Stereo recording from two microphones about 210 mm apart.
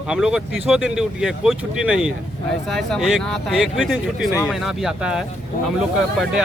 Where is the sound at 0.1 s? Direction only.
5° right (ahead or behind).